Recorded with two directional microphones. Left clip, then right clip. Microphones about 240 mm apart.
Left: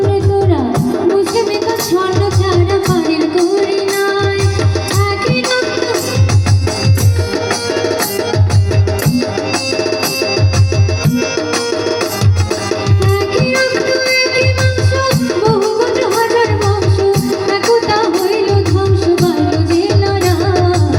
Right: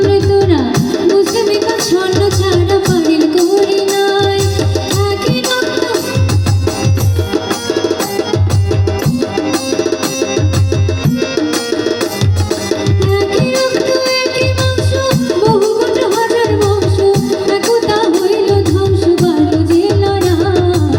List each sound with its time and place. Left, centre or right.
1.0 s music: right
5.3 s music: right
13.1 s music: right